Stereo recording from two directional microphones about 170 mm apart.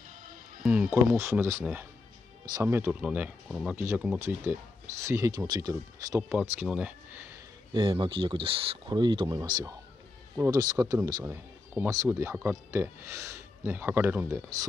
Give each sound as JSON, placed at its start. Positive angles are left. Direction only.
{"t": 0.7, "sound": "speech", "side_deg": -10}
{"t": 7.7, "sound": "speech", "side_deg": -30}